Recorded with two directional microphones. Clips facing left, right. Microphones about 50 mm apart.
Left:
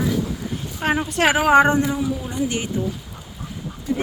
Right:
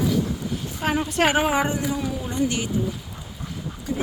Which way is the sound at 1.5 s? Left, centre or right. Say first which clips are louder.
Left 8 dB; left.